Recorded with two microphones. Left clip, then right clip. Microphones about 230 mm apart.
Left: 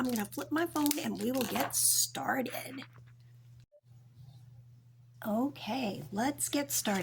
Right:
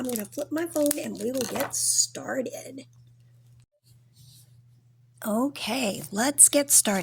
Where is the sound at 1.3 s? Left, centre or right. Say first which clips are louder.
Right 4 dB; right.